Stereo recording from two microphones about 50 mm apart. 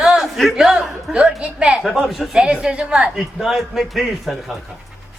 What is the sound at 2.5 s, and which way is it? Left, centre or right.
Speech, right.